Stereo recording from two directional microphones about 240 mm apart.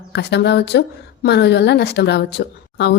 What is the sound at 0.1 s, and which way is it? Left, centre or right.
A woman's voice, left.